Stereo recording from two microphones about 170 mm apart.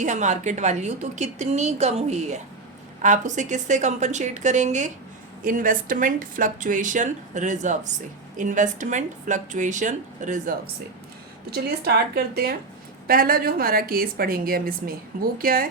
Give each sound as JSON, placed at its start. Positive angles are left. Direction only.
{"t": 0.0, "sound": "speech", "side_deg": -45}
{"t": 11.5, "sound": "a woman's voice", "side_deg": -65}